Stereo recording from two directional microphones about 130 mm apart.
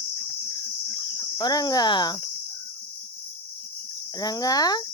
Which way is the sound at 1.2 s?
30° left (ahead or behind).